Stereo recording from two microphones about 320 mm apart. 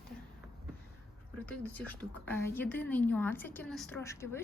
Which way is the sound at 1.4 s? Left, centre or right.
Centre.